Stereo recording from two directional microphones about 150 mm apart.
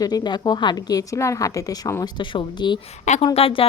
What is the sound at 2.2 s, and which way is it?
Speech, 35° left (ahead or behind).